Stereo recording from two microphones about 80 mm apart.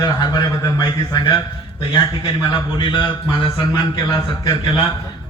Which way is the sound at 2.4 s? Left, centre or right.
Left.